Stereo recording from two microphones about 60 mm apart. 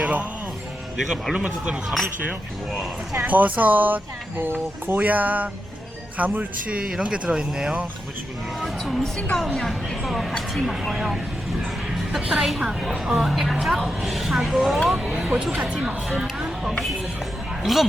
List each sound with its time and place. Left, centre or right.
0.0 s speech: right
0.9 s speech: centre
3.2 s speech: right
8.6 s a woman's voice: centre
12.4 s a woman's voice: centre